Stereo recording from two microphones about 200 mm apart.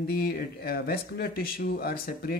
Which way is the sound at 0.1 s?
50° left (ahead or behind).